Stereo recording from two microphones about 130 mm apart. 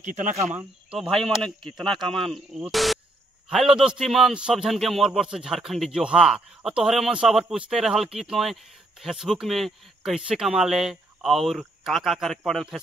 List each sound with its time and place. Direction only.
0.0 s speech: 75° right (ahead or behind)
0.9 s a man's voice: centre (ahead or behind)